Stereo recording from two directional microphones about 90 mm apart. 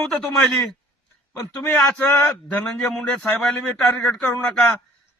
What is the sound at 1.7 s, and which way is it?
Speech, 20° left (ahead or behind).